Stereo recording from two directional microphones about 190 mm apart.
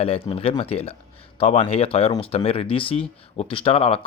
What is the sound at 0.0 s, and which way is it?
Speech, 30° left (ahead or behind).